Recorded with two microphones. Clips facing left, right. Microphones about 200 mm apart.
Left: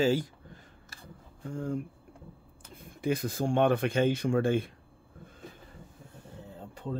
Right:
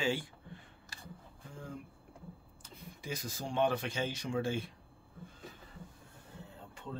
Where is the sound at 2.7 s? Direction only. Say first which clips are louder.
Left 12 dB; 60° left (ahead or behind).